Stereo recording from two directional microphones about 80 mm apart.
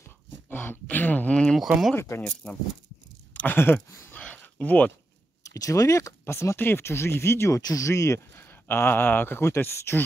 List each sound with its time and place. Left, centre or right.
0.5 s speech: left
2.0 s speech: left
4.1 s a sound: centre
5.4 s speech: left
8.5 s speech: left